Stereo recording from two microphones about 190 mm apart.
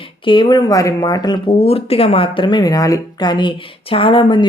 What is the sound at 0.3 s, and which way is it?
Speech, 25° left (ahead or behind).